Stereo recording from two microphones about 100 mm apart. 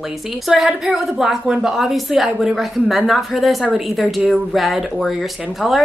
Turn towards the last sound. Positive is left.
turn(degrees=0)  # may be behind; listen again after turning